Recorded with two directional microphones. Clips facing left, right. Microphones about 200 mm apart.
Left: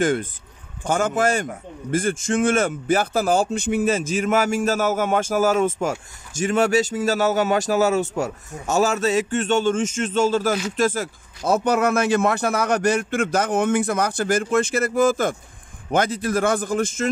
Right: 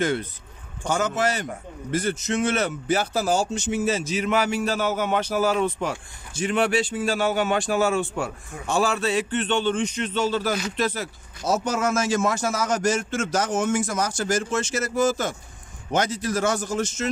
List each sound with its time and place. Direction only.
0.0 s a man's voice: 45° left (ahead or behind)